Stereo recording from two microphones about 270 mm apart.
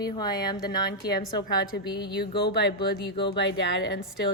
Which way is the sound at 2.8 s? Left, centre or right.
Centre.